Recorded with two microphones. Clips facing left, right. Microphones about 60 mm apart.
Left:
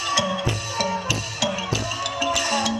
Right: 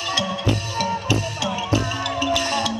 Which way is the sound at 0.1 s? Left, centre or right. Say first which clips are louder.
Right 1 dB; right.